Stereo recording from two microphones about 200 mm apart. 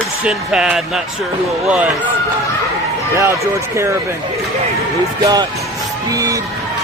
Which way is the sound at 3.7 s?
15° right (ahead or behind).